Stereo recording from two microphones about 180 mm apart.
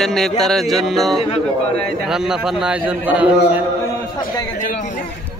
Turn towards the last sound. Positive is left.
turn(degrees=-10)  # may be behind; listen again after turning